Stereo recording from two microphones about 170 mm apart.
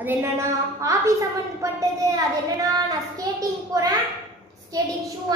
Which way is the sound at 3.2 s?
20° right (ahead or behind).